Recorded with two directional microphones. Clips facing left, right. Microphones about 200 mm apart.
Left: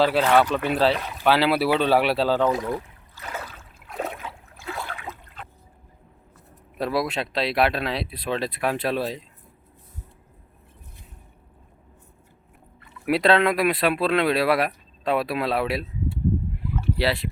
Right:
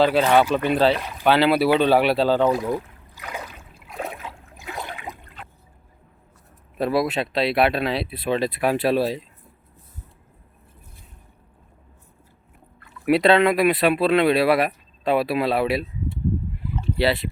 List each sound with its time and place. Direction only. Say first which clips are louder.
0.0 s speech: right 2 dB; centre (ahead or behind)
4.0 s water: even; 5° right (ahead or behind)
4.5 s a sound: even; 15° right (ahead or behind)
6.7 s speech: right 3 dB; centre (ahead or behind)
13.1 s speech: right 3 dB; centre (ahead or behind)
17.0 s speech: right 4 dB; centre (ahead or behind)